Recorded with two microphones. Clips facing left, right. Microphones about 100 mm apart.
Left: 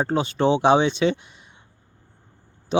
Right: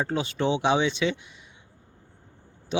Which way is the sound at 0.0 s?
35° left (ahead or behind).